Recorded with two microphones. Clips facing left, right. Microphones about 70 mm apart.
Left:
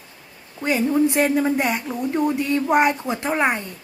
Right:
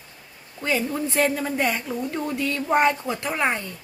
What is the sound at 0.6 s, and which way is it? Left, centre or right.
A woman's voice, left.